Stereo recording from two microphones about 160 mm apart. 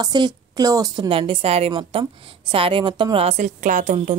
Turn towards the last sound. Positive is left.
turn(degrees=-55)  # may be behind; listen again after turning